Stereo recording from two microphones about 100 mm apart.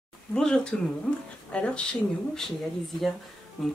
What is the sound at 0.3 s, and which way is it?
Speech, 10° left (ahead or behind).